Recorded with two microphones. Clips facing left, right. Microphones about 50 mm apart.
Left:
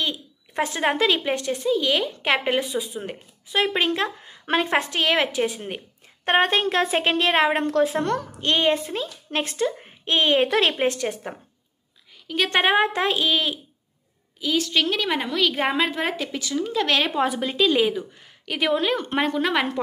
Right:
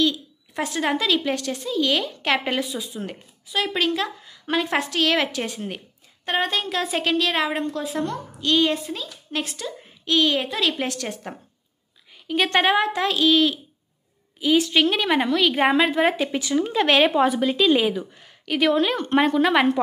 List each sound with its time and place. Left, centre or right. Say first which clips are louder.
0.0 s speech: right 6 dB; left
1.2 s a woman's voice: left 2 dB; centre
2.6 s a woman's voice: left 1 dB; left
4.6 s a woman's voice: even; left
6.2 s a woman's voice: left 4 dB; left
7.6 s a woman's voice: left 5 dB; left
8.4 s a woman's voice: right 2 dB; left
12.1 s a sound: right 2 dB; centre
12.7 s a woman's voice: left 1 dB; left
13.3 s a woman's voice: right 5 dB; centre
14.4 s a woman's voice: right 4 dB; centre
16.3 s speech: right 4 dB; right
17.2 s a woman's voice: right 2 dB; centre